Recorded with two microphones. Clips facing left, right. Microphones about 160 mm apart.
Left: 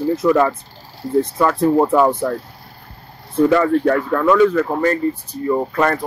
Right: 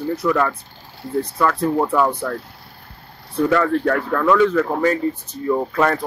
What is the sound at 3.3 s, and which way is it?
Speech, 10° left (ahead or behind).